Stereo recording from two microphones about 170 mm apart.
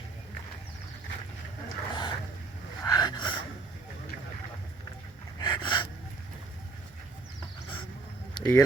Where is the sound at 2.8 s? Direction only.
20° left (ahead or behind).